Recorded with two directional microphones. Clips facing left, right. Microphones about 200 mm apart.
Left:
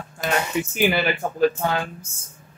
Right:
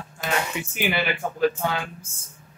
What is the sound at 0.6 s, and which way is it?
Speech, 45° left (ahead or behind).